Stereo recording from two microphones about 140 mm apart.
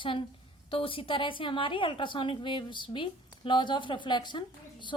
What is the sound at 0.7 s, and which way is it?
A woman's voice, 40° left (ahead or behind).